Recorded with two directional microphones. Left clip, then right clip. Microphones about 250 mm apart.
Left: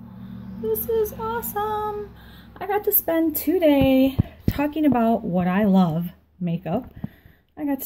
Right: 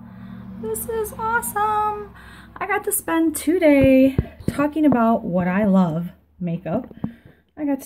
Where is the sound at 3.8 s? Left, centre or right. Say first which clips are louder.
Right 4 dB; right.